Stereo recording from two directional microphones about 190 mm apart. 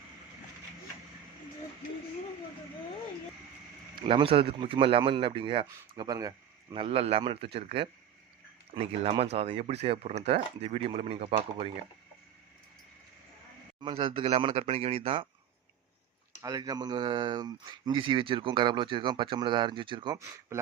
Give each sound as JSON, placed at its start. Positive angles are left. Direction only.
{"t": 3.9, "sound": "speech", "side_deg": -30}
{"t": 6.8, "sound": "speech", "side_deg": -30}
{"t": 13.8, "sound": "speech", "side_deg": -25}
{"t": 16.4, "sound": "speech", "side_deg": -20}